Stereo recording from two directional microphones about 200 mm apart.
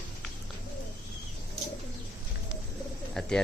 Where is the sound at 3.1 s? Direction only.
Centre (ahead or behind).